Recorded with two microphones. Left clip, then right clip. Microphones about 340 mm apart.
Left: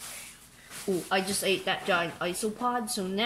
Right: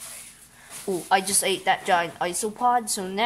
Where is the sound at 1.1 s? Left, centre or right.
Right.